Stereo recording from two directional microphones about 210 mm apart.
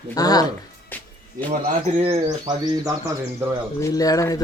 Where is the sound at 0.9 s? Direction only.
10° left (ahead or behind).